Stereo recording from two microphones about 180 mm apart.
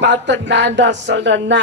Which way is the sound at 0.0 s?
80° right.